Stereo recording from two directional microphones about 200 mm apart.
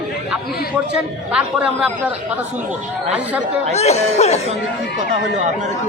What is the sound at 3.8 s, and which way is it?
Speech, 35° left (ahead or behind).